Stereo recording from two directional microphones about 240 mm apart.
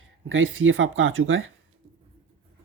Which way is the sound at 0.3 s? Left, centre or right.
Right.